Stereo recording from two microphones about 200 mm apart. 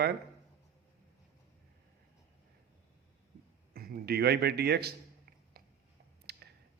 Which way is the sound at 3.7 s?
50° right (ahead or behind).